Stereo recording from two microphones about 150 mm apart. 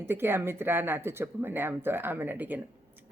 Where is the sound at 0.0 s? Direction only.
15° right (ahead or behind).